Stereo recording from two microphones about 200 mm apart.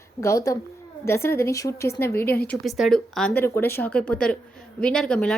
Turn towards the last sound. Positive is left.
turn(degrees=5)  # may be behind; listen again after turning